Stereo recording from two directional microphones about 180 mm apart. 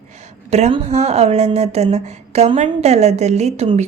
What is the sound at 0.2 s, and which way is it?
A woman's voice, 35° right (ahead or behind).